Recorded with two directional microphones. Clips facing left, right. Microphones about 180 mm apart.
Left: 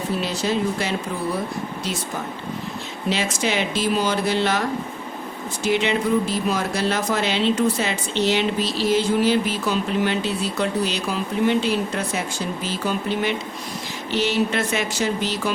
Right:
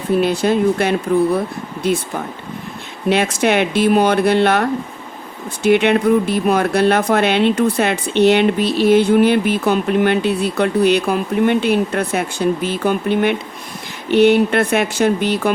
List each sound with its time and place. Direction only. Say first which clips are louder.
0.2 s speech: right 9 dB; 55° right (ahead or behind)
3.1 s speech: right 8 dB; 60° right (ahead or behind)